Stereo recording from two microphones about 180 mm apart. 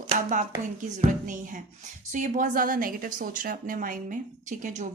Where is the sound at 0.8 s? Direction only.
45° right (ahead or behind).